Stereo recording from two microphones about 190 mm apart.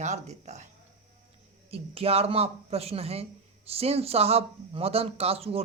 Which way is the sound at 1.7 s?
30° right (ahead or behind).